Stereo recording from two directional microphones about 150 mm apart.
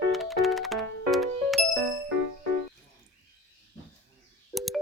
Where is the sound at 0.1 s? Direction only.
Centre (ahead or behind).